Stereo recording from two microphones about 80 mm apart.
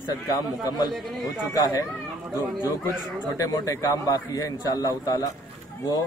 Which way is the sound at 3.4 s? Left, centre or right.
Left.